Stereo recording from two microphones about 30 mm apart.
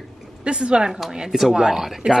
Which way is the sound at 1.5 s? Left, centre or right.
Right.